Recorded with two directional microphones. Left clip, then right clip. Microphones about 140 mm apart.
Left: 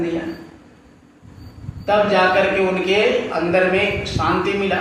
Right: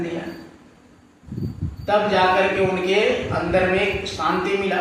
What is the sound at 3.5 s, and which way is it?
Speech, 25° left (ahead or behind).